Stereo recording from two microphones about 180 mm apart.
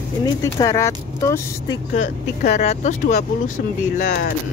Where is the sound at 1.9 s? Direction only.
55° left (ahead or behind).